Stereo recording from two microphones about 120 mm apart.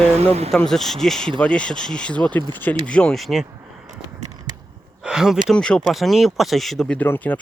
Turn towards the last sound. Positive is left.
turn(degrees=15)  # may be behind; listen again after turning